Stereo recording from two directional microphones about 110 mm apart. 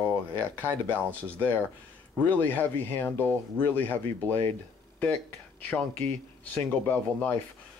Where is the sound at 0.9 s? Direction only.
15° left (ahead or behind).